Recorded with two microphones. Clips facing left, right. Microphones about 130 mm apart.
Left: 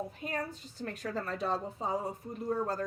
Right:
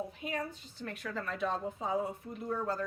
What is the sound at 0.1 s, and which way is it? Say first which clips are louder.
A woman's voice: left 1 dB; 40° left (ahead or behind).